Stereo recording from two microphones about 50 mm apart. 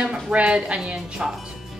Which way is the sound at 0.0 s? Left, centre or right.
Right.